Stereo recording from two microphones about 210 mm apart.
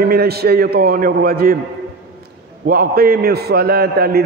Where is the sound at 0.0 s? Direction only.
45° right (ahead or behind).